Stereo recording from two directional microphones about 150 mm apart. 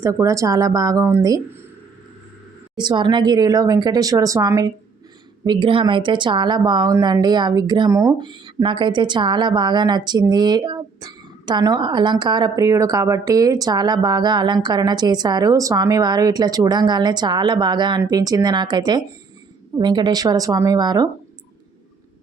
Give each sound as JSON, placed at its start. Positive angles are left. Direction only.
{"t": 0.0, "sound": "a woman's voice", "side_deg": -20}
{"t": 2.7, "sound": "a woman's voice", "side_deg": -30}
{"t": 5.5, "sound": "a woman's voice", "side_deg": -35}